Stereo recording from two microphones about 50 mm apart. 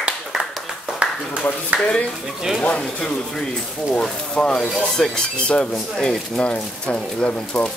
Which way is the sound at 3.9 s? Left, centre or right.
Centre.